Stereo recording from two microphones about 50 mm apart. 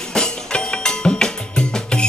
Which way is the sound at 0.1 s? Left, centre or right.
Centre.